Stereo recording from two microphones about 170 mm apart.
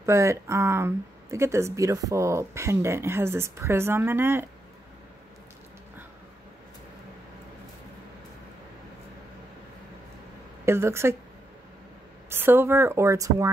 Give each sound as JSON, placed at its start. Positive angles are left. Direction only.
{"t": 0.0, "sound": "speech", "side_deg": -15}
{"t": 10.6, "sound": "a woman's voice", "side_deg": -15}
{"t": 12.3, "sound": "speech", "side_deg": -15}